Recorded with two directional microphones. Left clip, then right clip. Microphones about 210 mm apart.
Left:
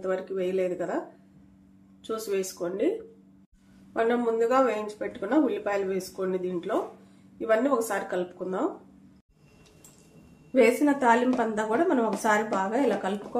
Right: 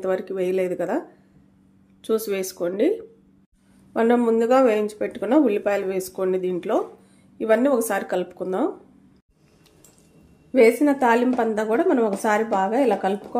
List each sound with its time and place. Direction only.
0.0 s speech: 50° right (ahead or behind)
2.0 s speech: 45° right (ahead or behind)
3.9 s speech: 45° right (ahead or behind)
10.5 s a woman's voice: 40° right (ahead or behind)